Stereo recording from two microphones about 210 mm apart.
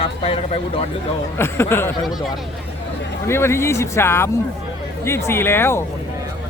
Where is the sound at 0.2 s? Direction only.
25° left (ahead or behind).